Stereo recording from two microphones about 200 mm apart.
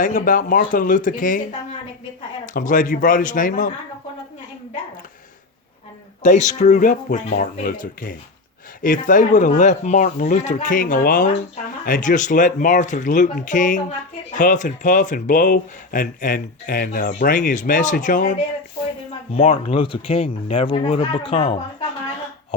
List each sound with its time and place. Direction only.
0.0 s speech: 45° left (ahead or behind)
2.5 s speech: 40° left (ahead or behind)
6.2 s speech: 35° left (ahead or behind)
19.3 s speech: 30° left (ahead or behind)